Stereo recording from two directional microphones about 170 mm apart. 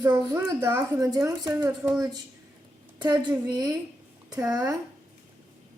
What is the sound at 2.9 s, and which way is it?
A woman's voice, 25° right (ahead or behind).